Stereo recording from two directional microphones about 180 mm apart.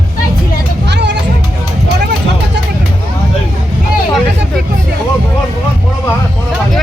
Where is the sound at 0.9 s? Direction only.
75° right (ahead or behind).